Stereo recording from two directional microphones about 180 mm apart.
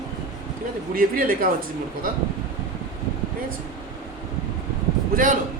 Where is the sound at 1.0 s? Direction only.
50° right (ahead or behind).